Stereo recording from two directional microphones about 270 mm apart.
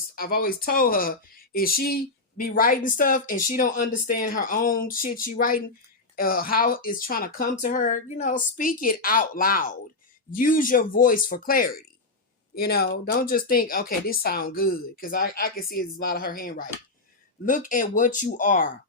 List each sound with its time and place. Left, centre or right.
0.2 s speech: left